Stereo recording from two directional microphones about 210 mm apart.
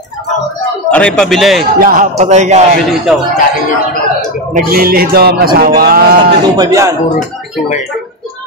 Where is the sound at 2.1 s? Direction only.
35° right (ahead or behind).